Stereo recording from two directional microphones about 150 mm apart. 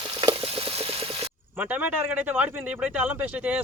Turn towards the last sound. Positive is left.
turn(degrees=-10)  # may be behind; listen again after turning